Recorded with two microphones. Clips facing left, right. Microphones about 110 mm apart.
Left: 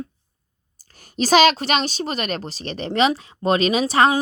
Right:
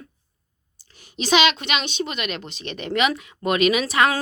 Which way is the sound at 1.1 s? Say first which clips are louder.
Left 4 dB; 40° left (ahead or behind).